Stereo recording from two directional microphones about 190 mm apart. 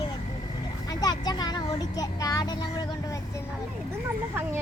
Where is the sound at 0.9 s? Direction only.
20° left (ahead or behind).